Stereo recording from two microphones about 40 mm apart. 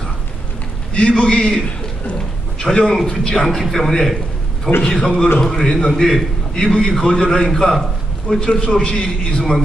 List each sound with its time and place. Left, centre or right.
0.9 s a man's voice: left
2.6 s a man's voice: centre
8.3 s a man's voice: left